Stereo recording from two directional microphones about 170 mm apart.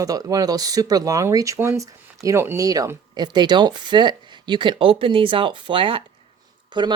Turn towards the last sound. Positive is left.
turn(degrees=-25)  # may be behind; listen again after turning